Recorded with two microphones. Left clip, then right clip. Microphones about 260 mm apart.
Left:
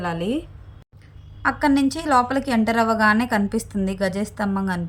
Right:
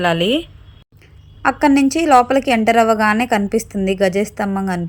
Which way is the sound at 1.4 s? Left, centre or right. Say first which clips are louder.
Right 5 dB; centre.